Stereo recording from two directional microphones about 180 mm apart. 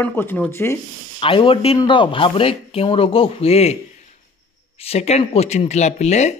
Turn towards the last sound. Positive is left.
turn(degrees=40)  # may be behind; listen again after turning